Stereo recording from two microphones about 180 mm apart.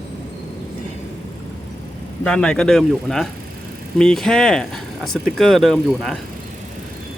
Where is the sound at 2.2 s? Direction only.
5° left (ahead or behind).